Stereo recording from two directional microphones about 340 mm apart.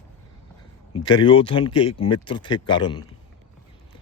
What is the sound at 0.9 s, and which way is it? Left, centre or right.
Speech, centre.